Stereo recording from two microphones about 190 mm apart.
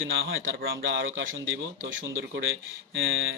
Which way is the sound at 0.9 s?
75° right (ahead or behind).